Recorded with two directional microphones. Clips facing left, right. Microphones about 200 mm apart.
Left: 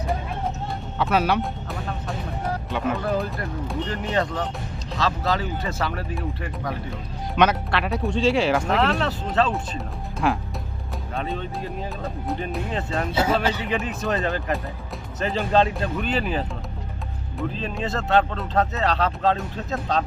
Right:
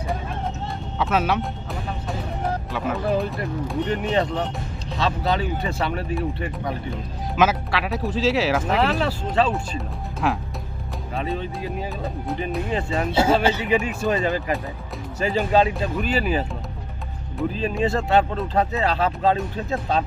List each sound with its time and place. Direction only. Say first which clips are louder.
0.9 s speech: left 1 dB; centre (ahead or behind)
2.6 s speech: left 1 dB; centre (ahead or behind)
3.8 s speech: right 3 dB; 20° right (ahead or behind)
7.3 s speech: even; centre (ahead or behind)
13.1 s speech: right 4 dB; 25° right (ahead or behind)
13.5 s speech: right 4 dB; 5° right (ahead or behind)